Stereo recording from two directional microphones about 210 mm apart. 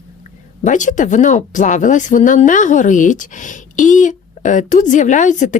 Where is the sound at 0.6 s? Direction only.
35° left (ahead or behind).